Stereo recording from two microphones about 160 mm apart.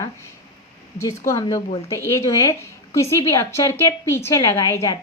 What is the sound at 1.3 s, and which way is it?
A woman's voice, 20° left (ahead or behind).